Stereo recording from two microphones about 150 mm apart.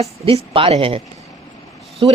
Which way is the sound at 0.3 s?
40° right (ahead or behind).